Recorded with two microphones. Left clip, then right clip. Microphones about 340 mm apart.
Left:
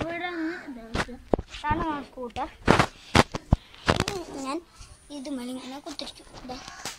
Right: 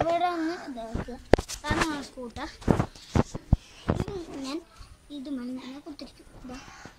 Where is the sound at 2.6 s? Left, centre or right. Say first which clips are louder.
Left 7 dB; left.